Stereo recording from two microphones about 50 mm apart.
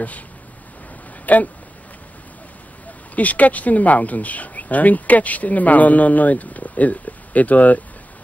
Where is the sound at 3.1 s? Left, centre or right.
Left.